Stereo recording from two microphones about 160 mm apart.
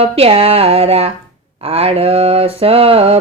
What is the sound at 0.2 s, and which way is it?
Mantra, 35° right (ahead or behind).